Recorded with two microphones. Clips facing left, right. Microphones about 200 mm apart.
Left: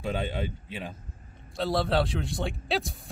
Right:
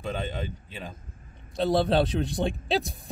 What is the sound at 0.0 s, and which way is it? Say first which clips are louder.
Speech: left 1 dB; 10° left (ahead or behind).